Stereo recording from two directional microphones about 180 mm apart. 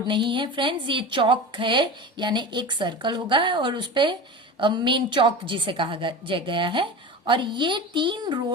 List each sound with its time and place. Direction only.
0.1 s speech: 25° right (ahead or behind)